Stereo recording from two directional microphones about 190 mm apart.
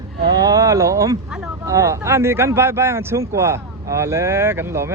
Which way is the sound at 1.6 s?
15° right (ahead or behind).